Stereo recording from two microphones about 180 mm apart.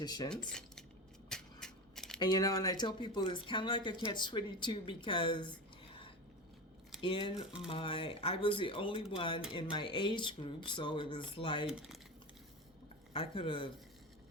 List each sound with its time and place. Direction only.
0.0 s speech: 20° left (ahead or behind)
0.3 s speech: 5° left (ahead or behind)
1.3 s a sound: 5° left (ahead or behind)
2.1 s speech: 25° left (ahead or behind)
7.0 s speech: 30° left (ahead or behind)
13.1 s speech: 30° left (ahead or behind)